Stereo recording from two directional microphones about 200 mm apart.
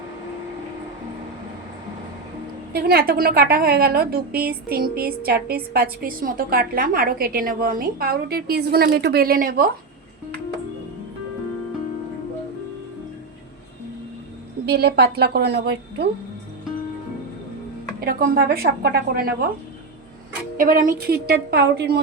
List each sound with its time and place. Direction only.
2.7 s a woman's voice: 50° right (ahead or behind)
14.7 s a woman's voice: 50° right (ahead or behind)
18.0 s a woman's voice: 50° right (ahead or behind)
20.6 s a woman's voice: 45° right (ahead or behind)